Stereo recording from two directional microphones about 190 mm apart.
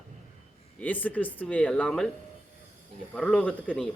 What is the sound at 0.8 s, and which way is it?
Speech, 10° left (ahead or behind).